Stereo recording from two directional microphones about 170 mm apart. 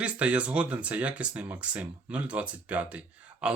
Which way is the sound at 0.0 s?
5° right (ahead or behind).